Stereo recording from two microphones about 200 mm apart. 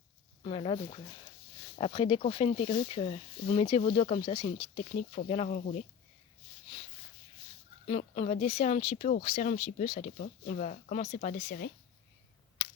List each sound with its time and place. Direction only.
0.4 s speech: 30° left (ahead or behind)
7.9 s speech: 30° left (ahead or behind); by 11.7 s 50° left (ahead or behind)